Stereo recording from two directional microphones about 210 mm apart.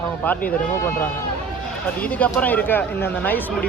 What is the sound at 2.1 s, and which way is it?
Speech, 5° left (ahead or behind).